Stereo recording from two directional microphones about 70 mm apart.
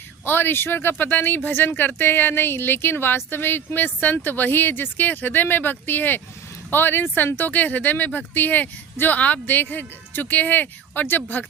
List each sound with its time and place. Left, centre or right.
0.3 s speech: left